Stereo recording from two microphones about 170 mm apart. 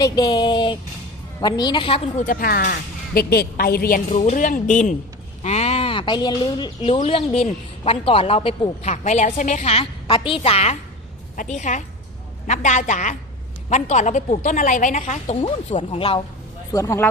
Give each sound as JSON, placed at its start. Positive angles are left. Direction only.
{"t": 0.0, "sound": "a sound", "side_deg": 25}
{"t": 1.4, "sound": "a woman's voice", "side_deg": 25}
{"t": 2.2, "sound": "a woman's voice", "side_deg": 60}
{"t": 4.2, "sound": "a woman's voice", "side_deg": 45}
{"t": 8.8, "sound": "a woman's voice", "side_deg": 45}
{"t": 16.7, "sound": "speech", "side_deg": 15}